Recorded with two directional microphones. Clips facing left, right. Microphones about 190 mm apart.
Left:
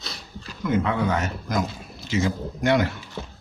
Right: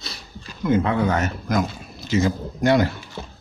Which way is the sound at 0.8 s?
45° right (ahead or behind).